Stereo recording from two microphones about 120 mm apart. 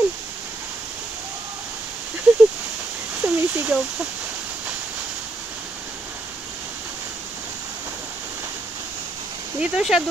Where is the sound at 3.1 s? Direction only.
10° right (ahead or behind).